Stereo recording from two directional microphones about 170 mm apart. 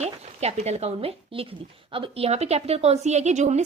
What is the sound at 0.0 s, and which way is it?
A woman's voice, 40° right (ahead or behind).